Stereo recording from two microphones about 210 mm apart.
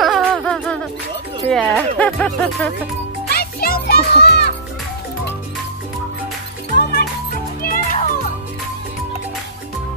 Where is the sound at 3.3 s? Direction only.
45° left (ahead or behind).